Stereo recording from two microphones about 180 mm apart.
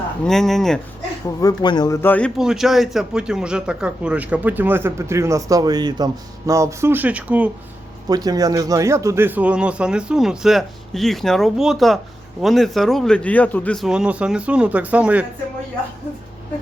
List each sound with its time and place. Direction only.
0.3 s speech: centre (ahead or behind)
1.4 s speech: 20° left (ahead or behind)
2.4 s a man's voice: centre (ahead or behind)
8.0 s speech: 20° right (ahead or behind)